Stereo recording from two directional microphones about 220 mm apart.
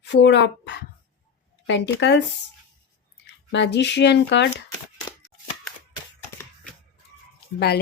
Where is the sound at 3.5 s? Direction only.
50° left (ahead or behind).